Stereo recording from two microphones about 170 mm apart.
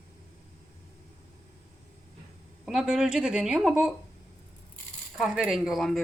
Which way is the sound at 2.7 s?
Centre (ahead or behind).